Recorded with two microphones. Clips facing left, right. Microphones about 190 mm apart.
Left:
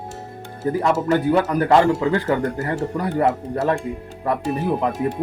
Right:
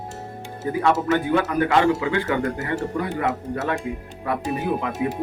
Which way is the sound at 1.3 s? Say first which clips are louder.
Left 4 dB; 35° left (ahead or behind).